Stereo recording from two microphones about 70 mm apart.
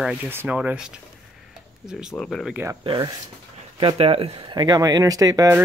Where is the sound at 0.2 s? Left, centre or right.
Right.